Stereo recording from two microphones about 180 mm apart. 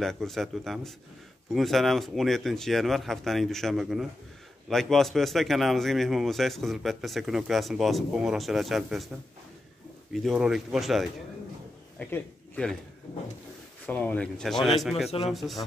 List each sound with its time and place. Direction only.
0.0 s a man's voice: centre (ahead or behind)
10.1 s a man's voice: centre (ahead or behind)
13.8 s a man's voice: 10° left (ahead or behind)
15.0 s speech: 35° left (ahead or behind)
15.3 s a man's voice: centre (ahead or behind)